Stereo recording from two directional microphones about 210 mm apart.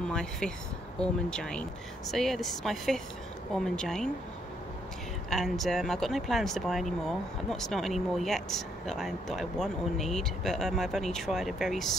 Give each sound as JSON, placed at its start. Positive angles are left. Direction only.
{"t": 0.0, "sound": "speech", "side_deg": 5}
{"t": 5.3, "sound": "speech", "side_deg": 0}